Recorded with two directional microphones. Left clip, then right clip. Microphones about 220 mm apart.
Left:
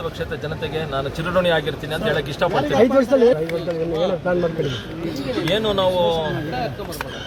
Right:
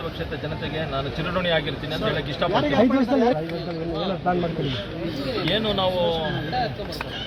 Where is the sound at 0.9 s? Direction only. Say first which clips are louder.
Left 7 dB; 15° left (ahead or behind).